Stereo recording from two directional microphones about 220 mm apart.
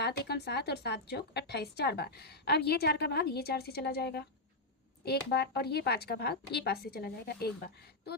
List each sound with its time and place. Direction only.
0.0 s speech: 50° left (ahead or behind)